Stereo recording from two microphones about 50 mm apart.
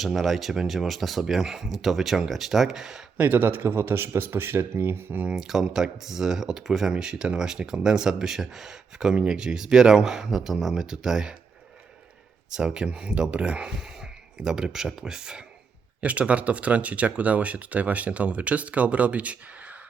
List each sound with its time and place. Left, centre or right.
0.0 s speech: centre
3.2 s speech: right
5.3 s speech: centre
12.5 s speech: centre
16.0 s speech: right